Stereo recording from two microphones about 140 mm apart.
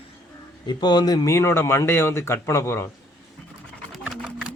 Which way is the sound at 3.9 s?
Centre (ahead or behind).